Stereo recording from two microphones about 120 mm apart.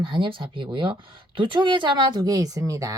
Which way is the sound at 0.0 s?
45° right (ahead or behind).